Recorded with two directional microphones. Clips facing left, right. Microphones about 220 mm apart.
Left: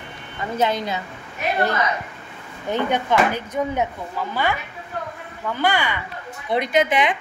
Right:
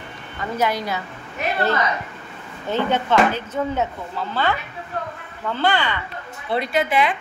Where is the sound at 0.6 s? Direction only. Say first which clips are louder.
Left 1 dB; 20° left (ahead or behind).